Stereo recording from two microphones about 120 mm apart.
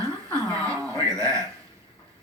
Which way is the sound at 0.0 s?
30° right (ahead or behind).